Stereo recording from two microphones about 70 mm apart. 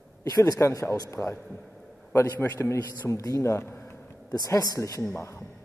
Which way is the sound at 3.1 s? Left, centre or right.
Left.